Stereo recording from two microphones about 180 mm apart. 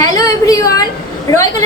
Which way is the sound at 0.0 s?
20° left (ahead or behind).